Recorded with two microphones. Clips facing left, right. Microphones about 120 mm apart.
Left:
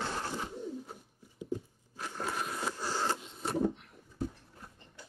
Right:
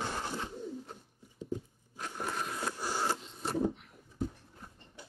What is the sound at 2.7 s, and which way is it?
Printer, 10° right (ahead or behind).